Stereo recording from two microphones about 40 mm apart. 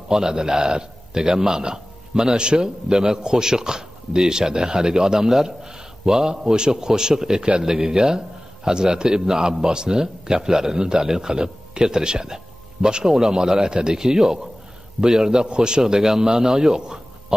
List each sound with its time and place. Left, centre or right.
0.1 s a man's voice: centre